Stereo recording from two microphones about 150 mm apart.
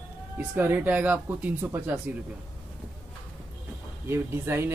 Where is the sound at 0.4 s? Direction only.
10° right (ahead or behind).